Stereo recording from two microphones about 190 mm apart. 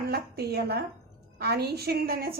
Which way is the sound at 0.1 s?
55° right (ahead or behind).